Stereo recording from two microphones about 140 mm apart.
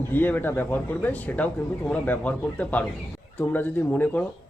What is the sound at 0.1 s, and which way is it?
Speech, 15° left (ahead or behind).